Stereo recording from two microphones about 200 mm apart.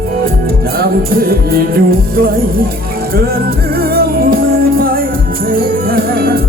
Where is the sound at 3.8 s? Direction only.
50° right (ahead or behind).